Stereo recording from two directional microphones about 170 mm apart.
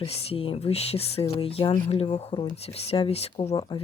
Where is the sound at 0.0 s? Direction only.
35° left (ahead or behind).